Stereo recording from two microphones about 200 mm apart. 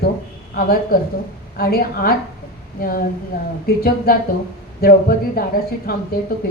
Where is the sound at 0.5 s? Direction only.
45° left (ahead or behind).